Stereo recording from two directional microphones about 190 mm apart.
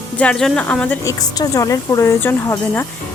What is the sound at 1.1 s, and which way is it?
Speech, 20° left (ahead or behind).